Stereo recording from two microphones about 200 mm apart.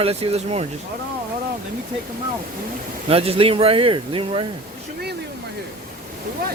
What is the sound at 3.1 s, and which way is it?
Speech, 30° right (ahead or behind).